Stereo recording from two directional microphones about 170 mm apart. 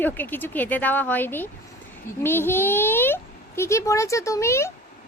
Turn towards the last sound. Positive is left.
turn(degrees=15)  # may be behind; listen again after turning